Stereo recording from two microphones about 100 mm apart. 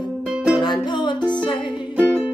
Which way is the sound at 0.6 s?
50° left (ahead or behind).